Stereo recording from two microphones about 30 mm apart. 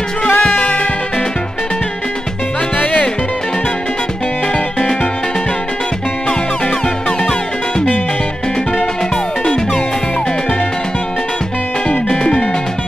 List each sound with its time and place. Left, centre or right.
0.2 s music: left
12.2 s music: left